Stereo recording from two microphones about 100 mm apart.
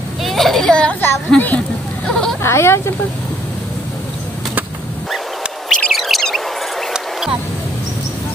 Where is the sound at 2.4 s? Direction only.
25° left (ahead or behind).